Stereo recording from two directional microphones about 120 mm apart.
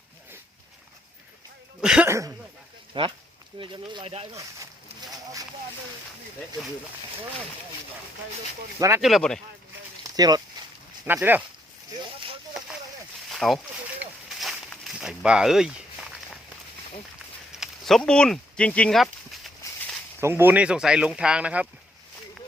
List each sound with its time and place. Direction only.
1.8 s speech: 5° right (ahead or behind)
2.0 s speech: 25° right (ahead or behind)
2.9 s speech: 45° right (ahead or behind)
4.0 s speech: 55° right (ahead or behind)
4.4 s a sound: 30° right (ahead or behind)
9.0 s speech: centre (ahead or behind)
10.2 s speech: 35° right (ahead or behind)
11.0 s speech: 15° right (ahead or behind)
13.3 s speech: centre (ahead or behind)
14.3 s a sound: centre (ahead or behind)
17.5 s speech: centre (ahead or behind)
18.9 s a sound: centre (ahead or behind)
20.2 s speech: 15° right (ahead or behind)